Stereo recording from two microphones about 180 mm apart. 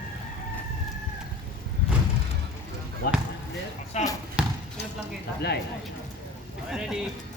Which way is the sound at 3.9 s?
40° left (ahead or behind).